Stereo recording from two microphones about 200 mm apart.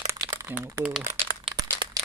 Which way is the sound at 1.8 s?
25° right (ahead or behind).